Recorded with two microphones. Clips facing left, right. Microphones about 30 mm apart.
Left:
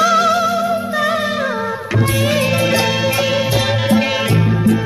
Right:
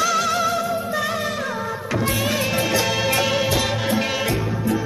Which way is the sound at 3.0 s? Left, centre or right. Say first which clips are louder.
Left 3 dB; centre.